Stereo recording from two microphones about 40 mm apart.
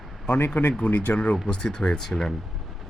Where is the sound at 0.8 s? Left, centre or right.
Left.